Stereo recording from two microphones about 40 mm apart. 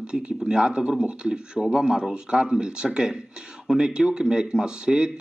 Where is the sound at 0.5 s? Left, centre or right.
Right.